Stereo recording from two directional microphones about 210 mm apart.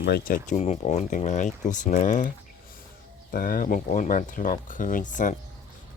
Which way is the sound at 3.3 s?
40° left (ahead or behind).